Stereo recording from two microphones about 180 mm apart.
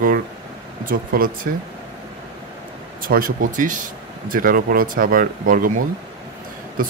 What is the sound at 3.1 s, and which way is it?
Speech, 50° right (ahead or behind).